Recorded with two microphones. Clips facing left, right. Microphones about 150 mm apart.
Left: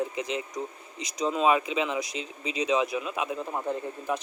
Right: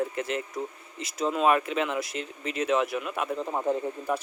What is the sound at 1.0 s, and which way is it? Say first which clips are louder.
Speech: even; 5° right (ahead or behind).